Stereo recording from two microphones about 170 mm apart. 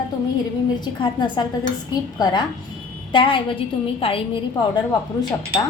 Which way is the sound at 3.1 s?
30° left (ahead or behind).